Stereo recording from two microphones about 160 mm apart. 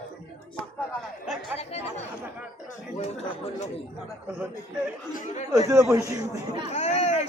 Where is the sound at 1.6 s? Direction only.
40° left (ahead or behind).